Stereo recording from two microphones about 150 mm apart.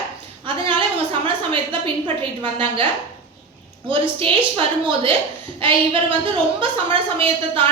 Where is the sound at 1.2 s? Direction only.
35° right (ahead or behind).